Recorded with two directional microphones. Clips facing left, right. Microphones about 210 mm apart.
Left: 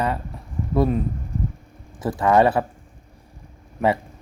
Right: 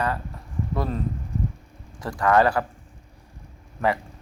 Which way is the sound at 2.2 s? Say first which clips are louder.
Left 2 dB; 20° left (ahead or behind).